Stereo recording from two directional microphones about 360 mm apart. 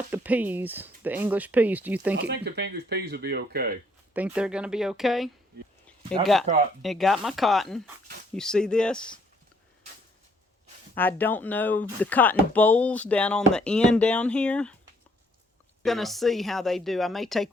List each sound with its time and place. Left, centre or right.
0.1 s speech: centre
2.1 s speech: right
4.1 s speech: centre
6.5 s speech: centre
6.8 s speech: centre
10.9 s speech: centre
15.8 s speech: centre